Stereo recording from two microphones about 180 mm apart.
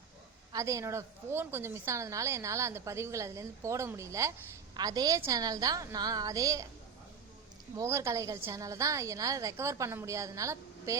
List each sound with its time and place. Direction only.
0.5 s a woman's voice: 15° right (ahead or behind)
7.8 s a woman's voice: 15° right (ahead or behind)